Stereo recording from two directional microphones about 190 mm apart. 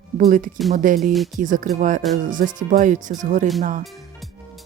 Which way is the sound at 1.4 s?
45° right (ahead or behind).